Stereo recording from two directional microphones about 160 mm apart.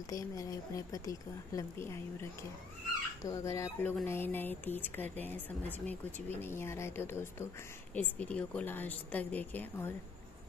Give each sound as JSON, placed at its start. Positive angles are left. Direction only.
{"t": 0.1, "sound": "speech", "side_deg": 20}